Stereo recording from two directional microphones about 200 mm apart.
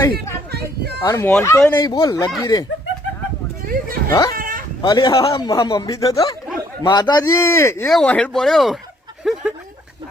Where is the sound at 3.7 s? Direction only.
45° right (ahead or behind).